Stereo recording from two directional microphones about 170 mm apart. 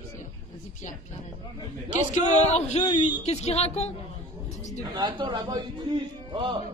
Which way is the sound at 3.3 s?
40° left (ahead or behind).